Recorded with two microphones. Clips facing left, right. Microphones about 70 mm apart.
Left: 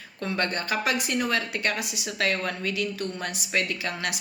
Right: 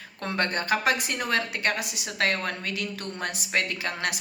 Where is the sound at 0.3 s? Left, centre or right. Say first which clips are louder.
Right 2 dB; right.